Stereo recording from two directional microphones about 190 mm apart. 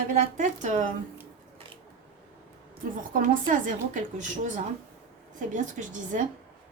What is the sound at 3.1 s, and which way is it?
A woman's voice, 45° right (ahead or behind).